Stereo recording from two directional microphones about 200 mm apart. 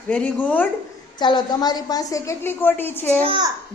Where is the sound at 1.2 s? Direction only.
20° left (ahead or behind).